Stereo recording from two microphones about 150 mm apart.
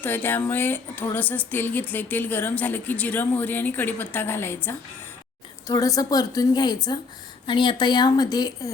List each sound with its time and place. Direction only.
0.0 s speech: 15° left (ahead or behind)